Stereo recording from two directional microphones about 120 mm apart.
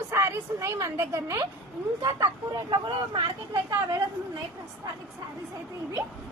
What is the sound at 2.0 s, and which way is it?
Speech, 35° right (ahead or behind).